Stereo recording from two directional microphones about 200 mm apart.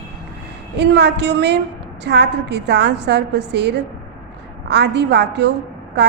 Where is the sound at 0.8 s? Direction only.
60° right (ahead or behind).